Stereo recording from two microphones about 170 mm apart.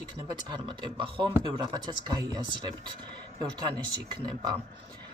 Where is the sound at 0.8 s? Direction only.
30° right (ahead or behind).